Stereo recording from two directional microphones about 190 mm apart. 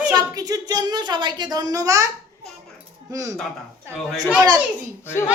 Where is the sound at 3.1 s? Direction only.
20° right (ahead or behind).